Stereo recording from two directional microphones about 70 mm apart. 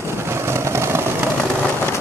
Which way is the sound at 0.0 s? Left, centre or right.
Right.